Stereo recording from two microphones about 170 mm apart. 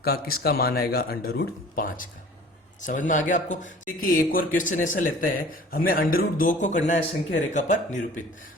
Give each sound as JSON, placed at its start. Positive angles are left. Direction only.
{"t": 0.0, "sound": "speech", "side_deg": 60}